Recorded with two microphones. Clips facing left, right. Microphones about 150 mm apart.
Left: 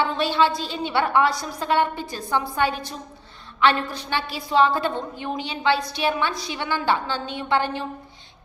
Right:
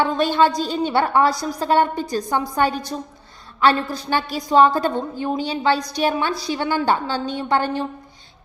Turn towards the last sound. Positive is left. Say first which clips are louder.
# right 3 dB
turn(degrees=-45)  # may be behind; listen again after turning